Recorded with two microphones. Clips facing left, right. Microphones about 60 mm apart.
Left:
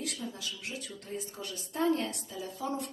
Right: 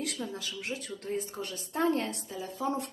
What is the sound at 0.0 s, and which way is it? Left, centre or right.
A woman's voice, right.